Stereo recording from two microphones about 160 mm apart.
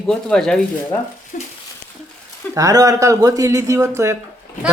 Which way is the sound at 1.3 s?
50° left (ahead or behind).